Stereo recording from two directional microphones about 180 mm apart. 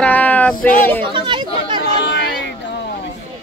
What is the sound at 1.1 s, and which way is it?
Chatter, 25° right (ahead or behind).